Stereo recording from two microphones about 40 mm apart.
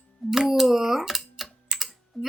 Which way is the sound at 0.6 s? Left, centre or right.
Centre.